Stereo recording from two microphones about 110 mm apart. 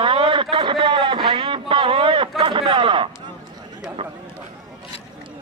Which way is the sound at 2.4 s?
50° right (ahead or behind).